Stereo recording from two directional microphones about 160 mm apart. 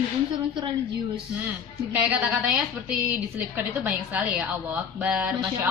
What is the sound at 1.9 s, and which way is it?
A woman's voice, 10° right (ahead or behind).